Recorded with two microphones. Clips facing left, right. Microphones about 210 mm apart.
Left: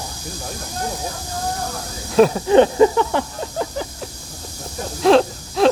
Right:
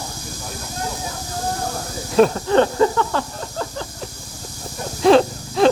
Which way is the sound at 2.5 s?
15° left (ahead or behind).